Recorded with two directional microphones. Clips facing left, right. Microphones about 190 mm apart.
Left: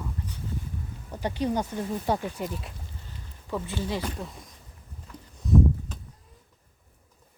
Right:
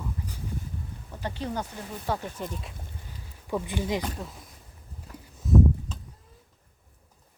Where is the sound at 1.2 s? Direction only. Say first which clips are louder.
Left 5 dB; 15° left (ahead or behind).